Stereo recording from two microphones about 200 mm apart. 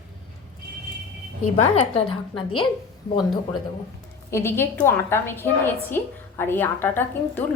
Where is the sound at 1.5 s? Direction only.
30° left (ahead or behind).